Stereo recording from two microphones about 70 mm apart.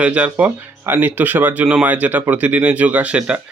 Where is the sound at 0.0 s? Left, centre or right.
Centre.